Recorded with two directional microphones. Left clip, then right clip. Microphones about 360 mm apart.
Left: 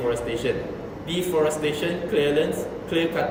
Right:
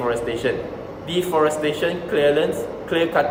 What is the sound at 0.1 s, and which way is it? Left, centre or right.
A man's voice, centre.